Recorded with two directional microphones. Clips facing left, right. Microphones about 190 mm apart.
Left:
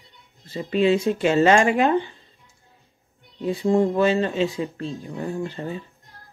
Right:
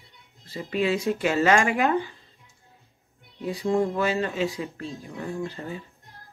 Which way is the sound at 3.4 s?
25° left (ahead or behind).